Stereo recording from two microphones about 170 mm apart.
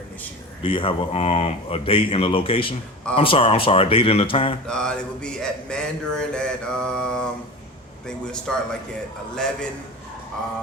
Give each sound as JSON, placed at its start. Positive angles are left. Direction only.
{"t": 0.6, "sound": "speech", "side_deg": 30}
{"t": 4.6, "sound": "speech", "side_deg": 5}